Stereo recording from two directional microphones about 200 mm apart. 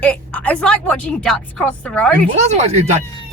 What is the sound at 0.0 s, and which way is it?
A woman's voice, 5° left (ahead or behind).